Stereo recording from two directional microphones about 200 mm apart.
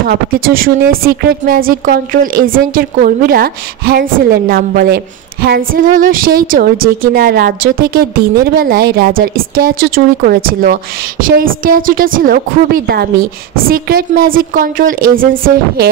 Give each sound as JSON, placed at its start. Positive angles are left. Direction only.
{"t": 0.1, "sound": "a woman's voice", "side_deg": -45}